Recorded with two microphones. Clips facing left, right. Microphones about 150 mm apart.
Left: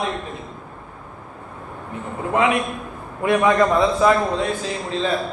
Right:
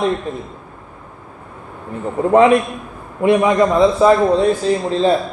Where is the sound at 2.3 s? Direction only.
35° right (ahead or behind).